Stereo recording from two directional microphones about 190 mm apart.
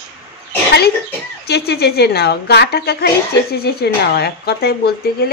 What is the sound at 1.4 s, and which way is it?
Speech, 60° left (ahead or behind).